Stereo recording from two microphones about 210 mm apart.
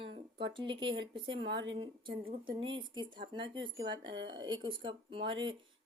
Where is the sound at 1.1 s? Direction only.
25° right (ahead or behind).